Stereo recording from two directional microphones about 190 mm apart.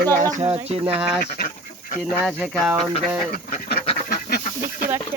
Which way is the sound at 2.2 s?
10° right (ahead or behind).